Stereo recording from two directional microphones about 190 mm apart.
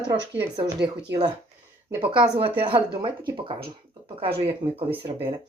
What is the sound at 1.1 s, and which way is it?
Speech, 70° right (ahead or behind).